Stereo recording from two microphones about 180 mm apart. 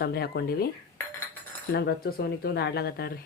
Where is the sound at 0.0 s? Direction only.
60° left (ahead or behind).